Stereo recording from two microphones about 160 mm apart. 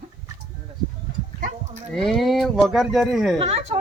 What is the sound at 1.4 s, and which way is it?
Sheep, 45° right (ahead or behind).